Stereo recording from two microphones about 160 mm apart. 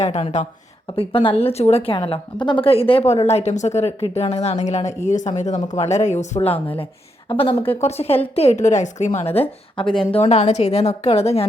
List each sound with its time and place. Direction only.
0.0 s a woman's voice: 45° left (ahead or behind)
7.3 s a woman's voice: 30° left (ahead or behind)
9.8 s speech: 5° left (ahead or behind)
10.1 s a woman's voice: 40° left (ahead or behind)